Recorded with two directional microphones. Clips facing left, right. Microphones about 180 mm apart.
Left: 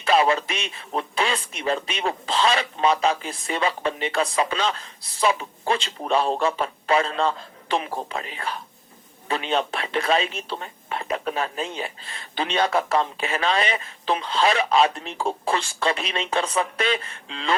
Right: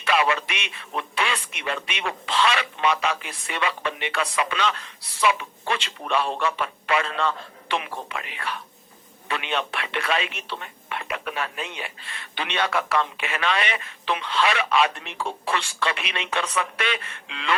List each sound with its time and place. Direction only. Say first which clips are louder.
0.0 s speech: left 3 dB; 30° left (ahead or behind)